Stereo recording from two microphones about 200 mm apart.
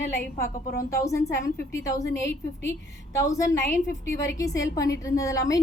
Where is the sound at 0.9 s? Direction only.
15° left (ahead or behind).